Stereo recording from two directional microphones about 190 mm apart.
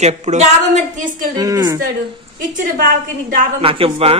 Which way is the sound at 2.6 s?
45° right (ahead or behind).